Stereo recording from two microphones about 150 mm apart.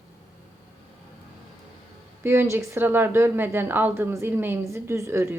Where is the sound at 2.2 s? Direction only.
15° right (ahead or behind).